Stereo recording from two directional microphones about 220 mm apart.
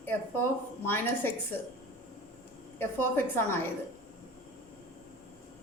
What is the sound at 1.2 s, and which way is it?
Speech, 10° left (ahead or behind).